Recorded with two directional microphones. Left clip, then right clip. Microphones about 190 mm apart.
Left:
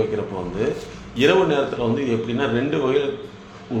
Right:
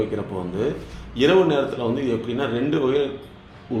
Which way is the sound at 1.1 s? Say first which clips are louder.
Even; 35° right (ahead or behind).